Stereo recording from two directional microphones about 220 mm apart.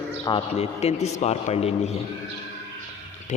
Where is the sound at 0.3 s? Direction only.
25° left (ahead or behind).